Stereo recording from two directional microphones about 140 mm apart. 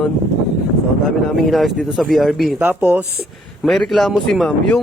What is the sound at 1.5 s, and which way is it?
Speech, centre (ahead or behind).